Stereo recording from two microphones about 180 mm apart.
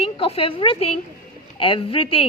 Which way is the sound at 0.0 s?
30° left (ahead or behind).